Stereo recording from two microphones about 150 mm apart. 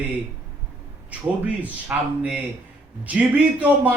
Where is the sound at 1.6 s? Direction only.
10° right (ahead or behind).